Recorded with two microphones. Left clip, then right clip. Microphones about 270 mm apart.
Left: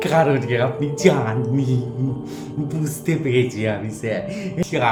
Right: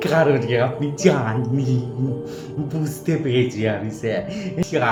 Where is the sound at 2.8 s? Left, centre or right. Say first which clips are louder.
Even; centre.